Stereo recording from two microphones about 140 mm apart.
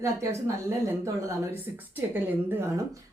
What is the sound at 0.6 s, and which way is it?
A woman's voice, 20° right (ahead or behind).